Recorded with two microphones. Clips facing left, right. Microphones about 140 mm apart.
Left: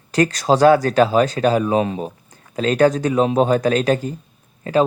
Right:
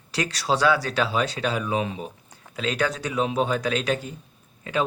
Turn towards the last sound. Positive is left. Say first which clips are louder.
# left 9 dB
turn(degrees=40)  # may be behind; listen again after turning